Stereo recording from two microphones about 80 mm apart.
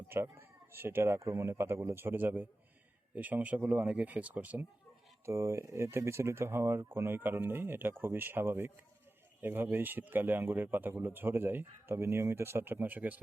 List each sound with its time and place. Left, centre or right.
0.1 s speech: right
5.2 s speech: right